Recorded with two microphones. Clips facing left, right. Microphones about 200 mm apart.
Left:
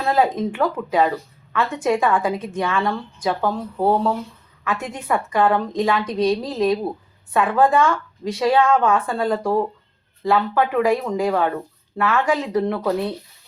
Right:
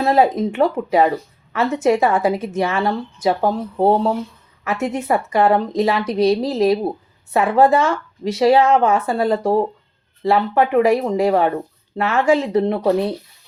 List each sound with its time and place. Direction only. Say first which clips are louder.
0.0 s a woman's voice: right 4 dB; 25° right (ahead or behind)